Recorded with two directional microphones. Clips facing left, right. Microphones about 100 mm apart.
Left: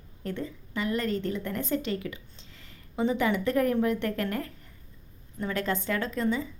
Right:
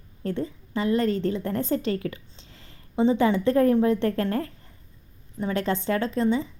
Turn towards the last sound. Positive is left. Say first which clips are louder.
# right 5 dB
turn(degrees=-30)  # may be behind; listen again after turning